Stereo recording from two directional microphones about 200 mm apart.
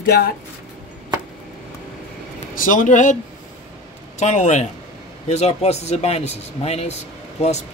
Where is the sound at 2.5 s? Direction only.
40° left (ahead or behind).